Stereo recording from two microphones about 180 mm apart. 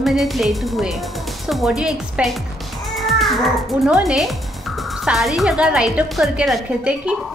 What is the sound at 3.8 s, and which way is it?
Speech, centre (ahead or behind).